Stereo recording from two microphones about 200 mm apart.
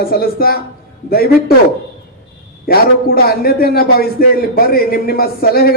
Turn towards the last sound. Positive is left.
turn(degrees=50)  # may be behind; listen again after turning